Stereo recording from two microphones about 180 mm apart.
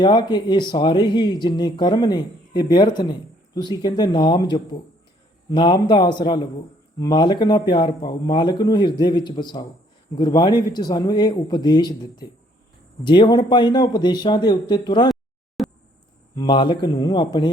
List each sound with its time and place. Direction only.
0.0 s speech: 25° left (ahead or behind)
15.1 s a sound: centre (ahead or behind)
16.3 s speech: 20° left (ahead or behind)